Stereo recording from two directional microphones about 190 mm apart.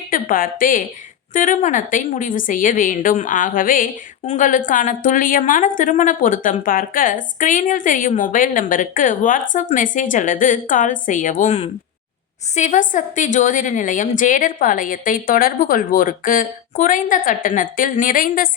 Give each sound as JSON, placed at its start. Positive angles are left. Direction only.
{"t": 0.1, "sound": "a woman's voice", "side_deg": 45}